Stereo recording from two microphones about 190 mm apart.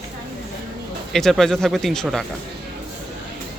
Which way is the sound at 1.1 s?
Centre (ahead or behind).